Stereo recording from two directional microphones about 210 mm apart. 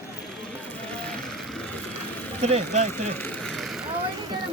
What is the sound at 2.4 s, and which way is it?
Speech, 30° right (ahead or behind).